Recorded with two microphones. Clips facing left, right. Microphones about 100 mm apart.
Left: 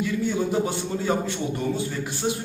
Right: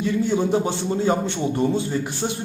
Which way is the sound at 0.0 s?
30° right (ahead or behind).